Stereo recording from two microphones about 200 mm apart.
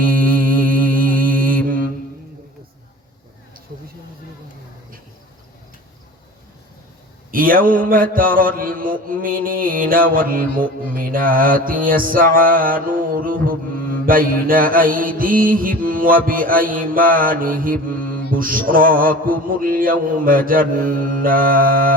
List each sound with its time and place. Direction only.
0.0 s mantra: 45° right (ahead or behind)
7.3 s mantra: 45° right (ahead or behind)